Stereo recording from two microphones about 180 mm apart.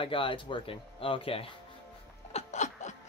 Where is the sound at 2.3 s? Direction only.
40° left (ahead or behind).